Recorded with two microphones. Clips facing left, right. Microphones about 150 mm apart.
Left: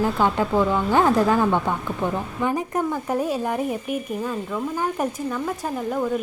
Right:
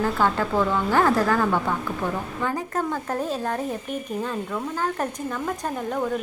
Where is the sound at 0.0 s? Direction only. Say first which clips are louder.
Left 2 dB; 15° left (ahead or behind).